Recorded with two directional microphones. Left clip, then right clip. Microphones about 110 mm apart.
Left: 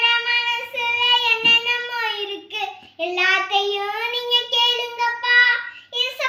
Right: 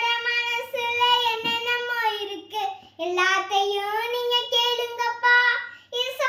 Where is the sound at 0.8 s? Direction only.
40° right (ahead or behind).